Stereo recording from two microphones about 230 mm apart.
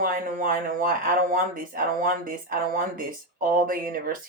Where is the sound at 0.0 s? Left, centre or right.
Right.